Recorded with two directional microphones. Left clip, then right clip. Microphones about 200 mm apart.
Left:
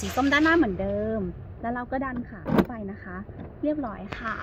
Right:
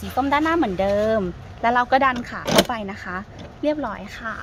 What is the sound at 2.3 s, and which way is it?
Speech, 50° right (ahead or behind).